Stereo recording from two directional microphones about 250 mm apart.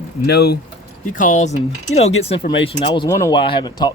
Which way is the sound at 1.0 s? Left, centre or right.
Left.